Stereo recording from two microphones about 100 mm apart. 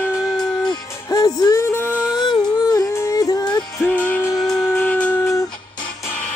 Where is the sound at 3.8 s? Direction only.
15° left (ahead or behind).